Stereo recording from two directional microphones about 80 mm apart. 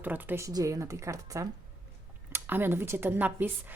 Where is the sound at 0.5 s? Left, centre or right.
Right.